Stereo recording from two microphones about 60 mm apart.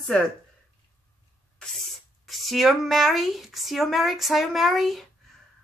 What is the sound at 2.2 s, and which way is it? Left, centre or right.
Speech, centre.